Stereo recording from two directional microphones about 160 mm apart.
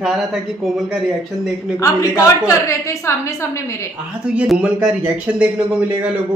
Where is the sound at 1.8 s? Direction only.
20° left (ahead or behind).